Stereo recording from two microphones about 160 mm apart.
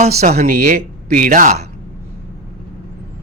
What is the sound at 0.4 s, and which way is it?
Speech, 65° right (ahead or behind).